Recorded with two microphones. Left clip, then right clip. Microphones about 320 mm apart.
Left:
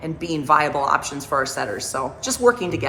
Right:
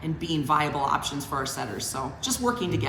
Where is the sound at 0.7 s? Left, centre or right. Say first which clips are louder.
Left 6 dB; centre.